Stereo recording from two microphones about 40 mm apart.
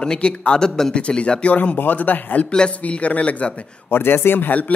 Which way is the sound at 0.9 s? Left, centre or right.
Left.